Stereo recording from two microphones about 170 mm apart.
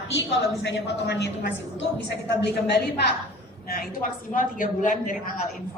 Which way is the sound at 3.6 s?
60° left (ahead or behind).